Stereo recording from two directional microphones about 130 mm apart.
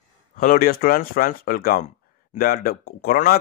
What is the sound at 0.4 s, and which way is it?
Speech, 90° left.